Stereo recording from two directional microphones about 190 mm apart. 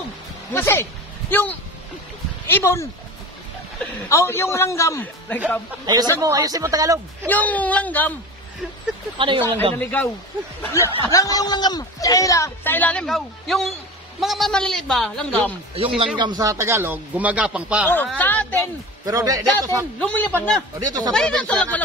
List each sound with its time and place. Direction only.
0.5 s speech: 10° left (ahead or behind)
6.1 s speech: 15° right (ahead or behind)
7.2 s speech: 10° left (ahead or behind)
9.8 s a man's voice: 10° left (ahead or behind)
15.7 s a man's voice: 30° right (ahead or behind); by 17.8 s 5° right (ahead or behind)
17.8 s speech: 10° left (ahead or behind)
19.0 s a man's voice: 20° right (ahead or behind)
20.0 s speech: 5° left (ahead or behind)
20.8 s a man's voice: 20° right (ahead or behind)
21.1 s a man's voice: 5° left (ahead or behind)